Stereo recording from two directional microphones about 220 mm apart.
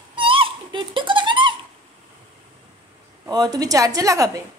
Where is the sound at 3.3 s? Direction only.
15° right (ahead or behind).